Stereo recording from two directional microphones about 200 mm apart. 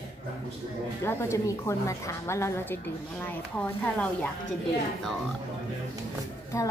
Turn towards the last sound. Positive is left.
turn(degrees=15)  # may be behind; listen again after turning